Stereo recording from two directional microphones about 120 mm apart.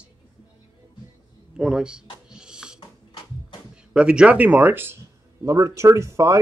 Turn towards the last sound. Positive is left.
turn(degrees=-25)  # may be behind; listen again after turning